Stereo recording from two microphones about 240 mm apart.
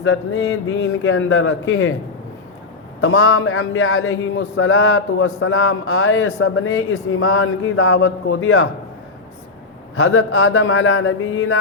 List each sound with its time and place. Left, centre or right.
0.0 s a man's voice: left
3.0 s a man's voice: left
7.9 s a man's voice: left
9.9 s a man's voice: left